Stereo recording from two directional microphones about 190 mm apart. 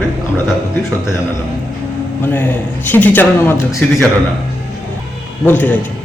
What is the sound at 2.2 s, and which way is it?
A man's voice, 10° left (ahead or behind).